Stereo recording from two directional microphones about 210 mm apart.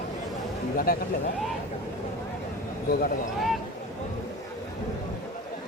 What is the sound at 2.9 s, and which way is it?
Speech, 45° left (ahead or behind).